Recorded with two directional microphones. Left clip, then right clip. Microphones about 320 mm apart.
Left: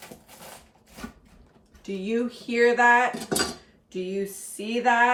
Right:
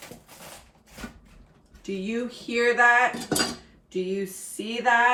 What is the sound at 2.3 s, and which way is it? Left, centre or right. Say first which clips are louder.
Speech: left 2 dB; centre.